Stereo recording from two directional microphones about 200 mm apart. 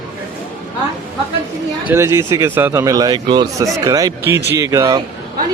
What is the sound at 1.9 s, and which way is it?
A man's voice, 15° right (ahead or behind).